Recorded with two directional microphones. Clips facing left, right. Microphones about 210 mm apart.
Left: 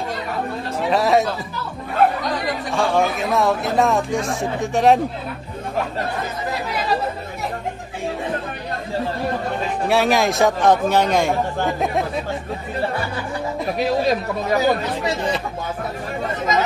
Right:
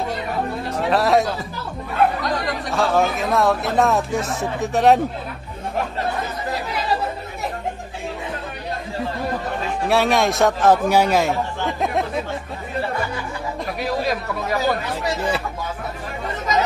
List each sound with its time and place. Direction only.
0.7 s speech: centre (ahead or behind)
2.7 s speech: centre (ahead or behind)
9.8 s speech: centre (ahead or behind)
11.8 s chatter: centre (ahead or behind)
14.0 s speech: 25° left (ahead or behind)